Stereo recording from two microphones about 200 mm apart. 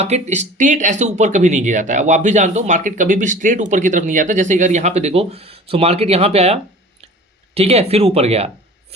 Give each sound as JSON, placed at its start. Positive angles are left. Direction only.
{"t": 0.0, "sound": "speech", "side_deg": -35}